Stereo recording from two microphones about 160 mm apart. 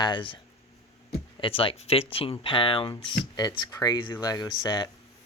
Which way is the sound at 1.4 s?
35° left (ahead or behind).